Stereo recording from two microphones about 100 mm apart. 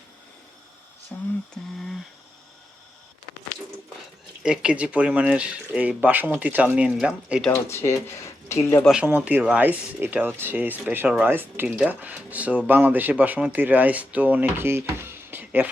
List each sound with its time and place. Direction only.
1.1 s speech: 20° left (ahead or behind)
4.4 s speech: 10° right (ahead or behind)
7.5 s speech: 25° left (ahead or behind)
9.0 s speech: 20° right (ahead or behind)